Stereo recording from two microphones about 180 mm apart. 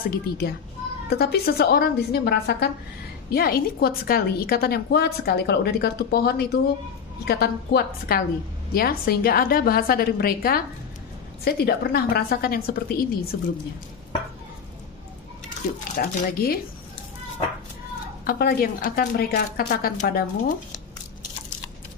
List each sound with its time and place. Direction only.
0.1 s a woman's voice: 60° left (ahead or behind)
16.0 s a woman's voice: 55° left (ahead or behind)
18.2 s a woman's voice: 55° left (ahead or behind)